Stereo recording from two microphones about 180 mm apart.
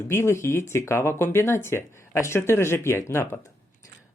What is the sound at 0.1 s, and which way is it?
Speech, 15° left (ahead or behind).